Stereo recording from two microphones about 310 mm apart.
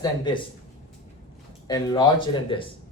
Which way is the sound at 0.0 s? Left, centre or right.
Centre.